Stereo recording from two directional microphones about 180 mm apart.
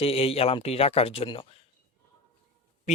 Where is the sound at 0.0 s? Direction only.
35° left (ahead or behind).